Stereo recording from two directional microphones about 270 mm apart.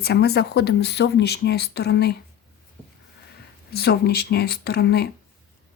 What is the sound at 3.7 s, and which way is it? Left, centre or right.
Speech, left.